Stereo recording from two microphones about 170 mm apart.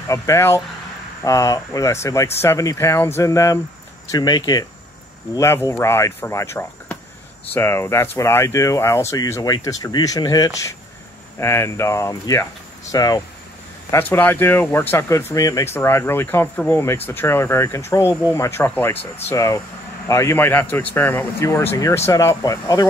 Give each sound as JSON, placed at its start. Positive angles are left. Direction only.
{"t": 0.1, "sound": "speech", "side_deg": 15}